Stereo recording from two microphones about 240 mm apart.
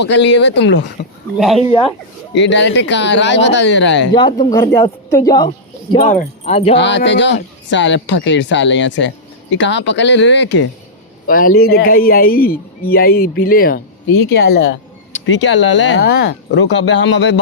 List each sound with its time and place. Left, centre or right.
0.0 s speech: left
1.4 s speech: centre
1.6 s speech: left
2.3 s speech: left
4.1 s speech: centre
5.5 s speech: left
6.7 s speech: left
11.3 s a man's voice: left